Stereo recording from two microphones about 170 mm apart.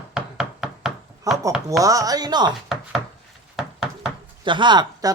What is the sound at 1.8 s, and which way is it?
Speech, 20° right (ahead or behind).